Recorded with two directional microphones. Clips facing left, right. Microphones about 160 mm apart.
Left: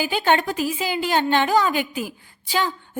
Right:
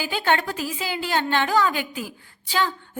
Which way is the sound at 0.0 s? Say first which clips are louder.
Left 3 dB; 15° left (ahead or behind).